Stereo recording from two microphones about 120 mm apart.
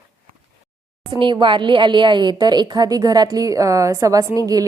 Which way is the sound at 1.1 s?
40° right (ahead or behind).